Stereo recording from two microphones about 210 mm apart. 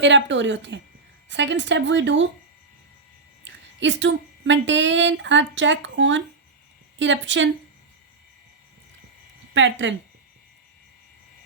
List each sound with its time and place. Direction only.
0.0 s a woman's voice: 60° right (ahead or behind)
3.4 s a woman's voice: 60° right (ahead or behind)
9.6 s a woman's voice: 60° right (ahead or behind)